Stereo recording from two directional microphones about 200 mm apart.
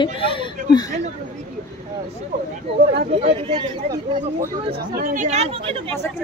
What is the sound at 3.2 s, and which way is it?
Speech, 25° right (ahead or behind).